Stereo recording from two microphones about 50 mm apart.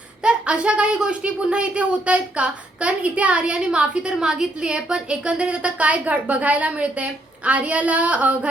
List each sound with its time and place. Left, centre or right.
0.2 s speech: right